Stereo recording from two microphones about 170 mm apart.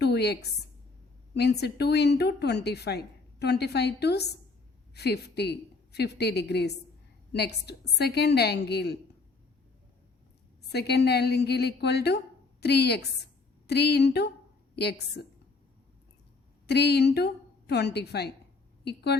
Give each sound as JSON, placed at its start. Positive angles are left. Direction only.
{"t": 0.0, "sound": "a sound", "side_deg": 75}
{"t": 1.3, "sound": "a woman's voice", "side_deg": 75}
{"t": 10.7, "sound": "a woman's voice", "side_deg": 75}
{"t": 16.6, "sound": "a woman's voice", "side_deg": 75}